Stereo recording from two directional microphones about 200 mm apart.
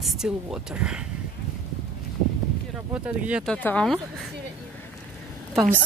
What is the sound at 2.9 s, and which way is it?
Speech, 5° right (ahead or behind).